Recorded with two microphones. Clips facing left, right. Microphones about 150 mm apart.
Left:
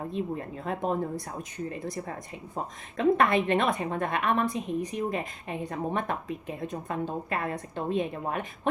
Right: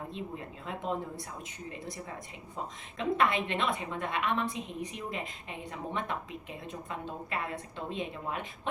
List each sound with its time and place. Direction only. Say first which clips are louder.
0.6 s a woman's voice: left 5 dB; 50° left (ahead or behind)
3.0 s a woman's voice: left 6 dB; 50° left (ahead or behind)